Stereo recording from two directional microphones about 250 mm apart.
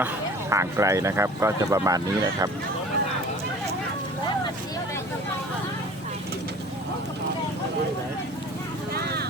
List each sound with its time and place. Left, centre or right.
0.5 s speech: centre
9.0 s vehicle: right